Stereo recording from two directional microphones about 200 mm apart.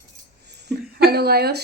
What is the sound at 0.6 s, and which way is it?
Speech, 50° right (ahead or behind).